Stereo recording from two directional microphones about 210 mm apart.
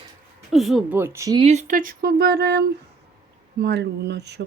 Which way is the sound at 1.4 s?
30° right (ahead or behind).